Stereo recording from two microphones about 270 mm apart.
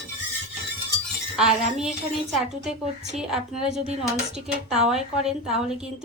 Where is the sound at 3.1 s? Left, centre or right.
Centre.